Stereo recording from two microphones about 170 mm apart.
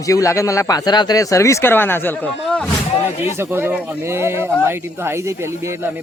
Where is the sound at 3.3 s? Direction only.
15° right (ahead or behind).